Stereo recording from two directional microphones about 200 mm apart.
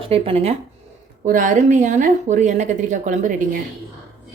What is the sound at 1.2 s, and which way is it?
A woman's voice, 40° right (ahead or behind).